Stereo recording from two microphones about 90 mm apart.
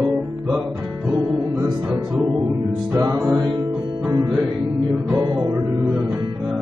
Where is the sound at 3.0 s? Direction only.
40° right (ahead or behind).